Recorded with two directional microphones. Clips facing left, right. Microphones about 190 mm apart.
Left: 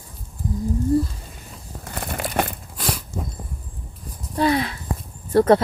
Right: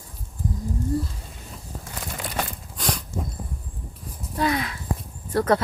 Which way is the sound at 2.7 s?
5° left (ahead or behind).